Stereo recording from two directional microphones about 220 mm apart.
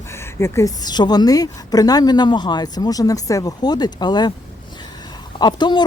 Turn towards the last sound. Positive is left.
turn(degrees=20)  # may be behind; listen again after turning